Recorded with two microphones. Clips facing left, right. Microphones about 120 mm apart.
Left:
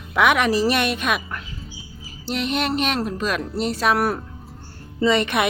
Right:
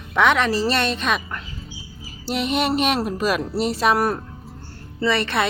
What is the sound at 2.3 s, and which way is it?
Speech, 5° right (ahead or behind).